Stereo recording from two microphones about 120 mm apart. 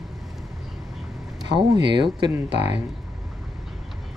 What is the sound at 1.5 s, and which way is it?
Speech, 40° right (ahead or behind).